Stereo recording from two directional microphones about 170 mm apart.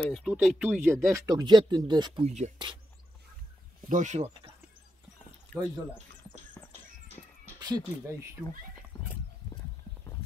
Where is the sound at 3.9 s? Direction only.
45° right (ahead or behind).